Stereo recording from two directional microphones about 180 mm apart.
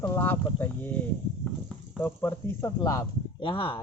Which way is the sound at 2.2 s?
15° left (ahead or behind).